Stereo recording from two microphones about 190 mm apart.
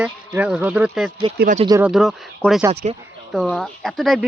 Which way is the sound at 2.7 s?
35° right (ahead or behind).